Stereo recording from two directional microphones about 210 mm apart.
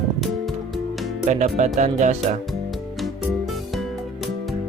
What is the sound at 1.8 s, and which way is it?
Speech, 35° right (ahead or behind).